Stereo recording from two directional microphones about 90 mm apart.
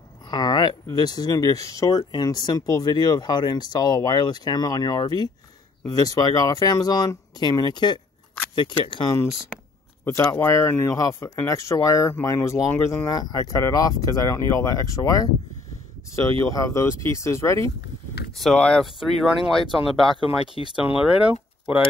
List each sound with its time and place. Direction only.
0.3 s a sound: 50° left (ahead or behind)
0.8 s speech: 50° left (ahead or behind)
10.3 s speech: 30° left (ahead or behind)
18.3 s speech: centre (ahead or behind)
20.2 s speech: 85° left
20.7 s speech: 10° right (ahead or behind)